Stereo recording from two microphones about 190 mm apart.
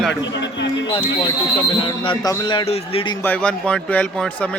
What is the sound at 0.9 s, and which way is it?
A man's voice, 25° left (ahead or behind).